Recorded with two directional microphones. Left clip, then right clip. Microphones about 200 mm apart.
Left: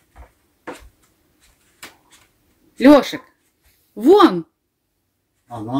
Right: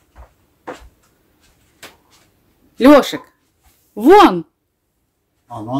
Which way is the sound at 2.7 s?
5° right (ahead or behind).